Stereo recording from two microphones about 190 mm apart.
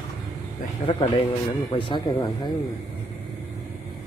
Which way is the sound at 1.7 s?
25° left (ahead or behind).